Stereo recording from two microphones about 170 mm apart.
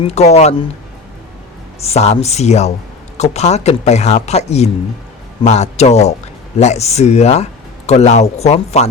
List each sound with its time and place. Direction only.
0.0 s speech: 40° left (ahead or behind)
1.8 s speech: 40° left (ahead or behind)